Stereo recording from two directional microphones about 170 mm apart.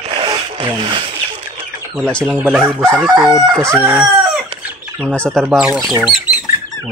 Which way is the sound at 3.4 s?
Centre (ahead or behind).